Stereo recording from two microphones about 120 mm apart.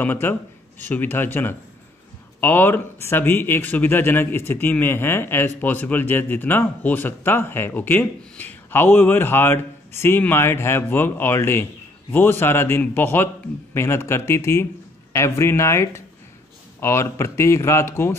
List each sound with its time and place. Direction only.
0.0 s speech: 15° left (ahead or behind)